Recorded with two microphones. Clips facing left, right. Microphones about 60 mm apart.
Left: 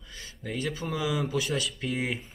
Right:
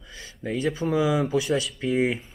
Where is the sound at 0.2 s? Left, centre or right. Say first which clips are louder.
Right 6 dB; right.